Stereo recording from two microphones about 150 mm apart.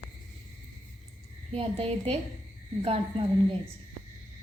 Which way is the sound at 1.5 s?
40° right (ahead or behind).